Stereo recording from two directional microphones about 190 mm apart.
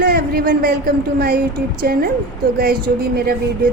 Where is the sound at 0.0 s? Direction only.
50° right (ahead or behind).